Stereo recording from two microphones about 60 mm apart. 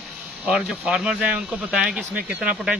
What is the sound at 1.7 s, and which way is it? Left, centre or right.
Speech, centre.